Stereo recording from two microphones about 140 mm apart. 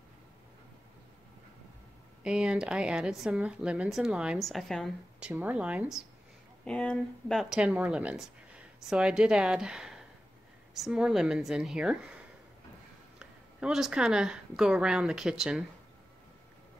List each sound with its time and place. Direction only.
2.2 s speech: 5° right (ahead or behind)
5.2 s speech: 10° right (ahead or behind)
6.6 s speech: 5° left (ahead or behind)
13.2 s speech: 5° right (ahead or behind)